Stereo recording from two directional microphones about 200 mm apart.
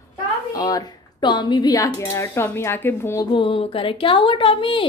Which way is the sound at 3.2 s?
25° left (ahead or behind).